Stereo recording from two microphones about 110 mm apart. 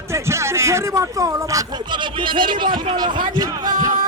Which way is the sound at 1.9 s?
45° right (ahead or behind).